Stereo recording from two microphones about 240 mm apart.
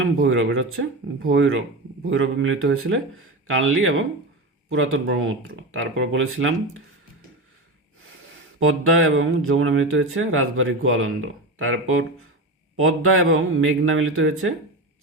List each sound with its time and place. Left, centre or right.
0.0 s speech: right
8.5 s speech: right
12.8 s speech: right